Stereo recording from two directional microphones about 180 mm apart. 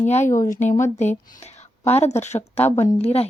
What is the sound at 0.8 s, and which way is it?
A woman's voice, 40° left (ahead or behind).